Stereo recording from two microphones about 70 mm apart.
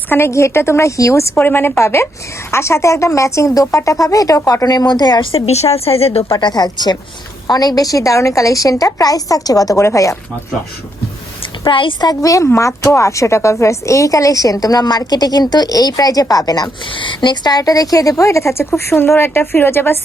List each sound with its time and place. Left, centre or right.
0.1 s speech: left
1.4 s a woman's voice: left
6.4 s a woman's voice: left
9.8 s speech: left
11.6 s speech: left
12.5 s speech: left
17.2 s a woman's voice: left